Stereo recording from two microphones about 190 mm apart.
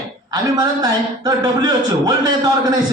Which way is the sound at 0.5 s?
20° right (ahead or behind).